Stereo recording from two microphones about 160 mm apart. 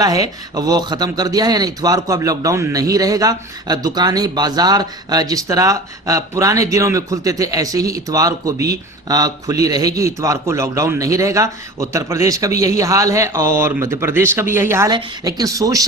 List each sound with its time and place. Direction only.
0.0 s speech: 25° right (ahead or behind)